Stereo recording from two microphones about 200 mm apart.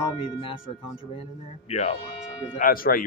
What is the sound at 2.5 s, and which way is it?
Speech, 45° left (ahead or behind).